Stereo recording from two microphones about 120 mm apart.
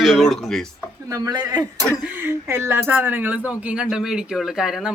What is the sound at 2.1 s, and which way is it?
Speech, 20° right (ahead or behind).